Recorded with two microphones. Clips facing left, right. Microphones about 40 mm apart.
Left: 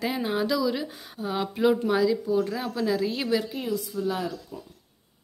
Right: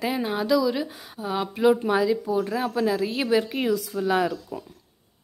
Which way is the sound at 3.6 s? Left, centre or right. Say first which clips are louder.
Right 4 dB; right.